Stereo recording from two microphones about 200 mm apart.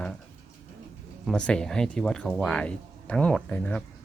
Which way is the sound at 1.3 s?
5° left (ahead or behind).